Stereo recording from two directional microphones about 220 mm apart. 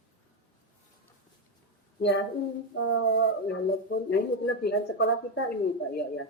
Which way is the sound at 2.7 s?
60° left (ahead or behind).